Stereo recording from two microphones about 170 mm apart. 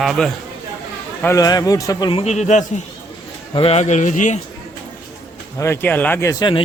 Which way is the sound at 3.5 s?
35° left (ahead or behind).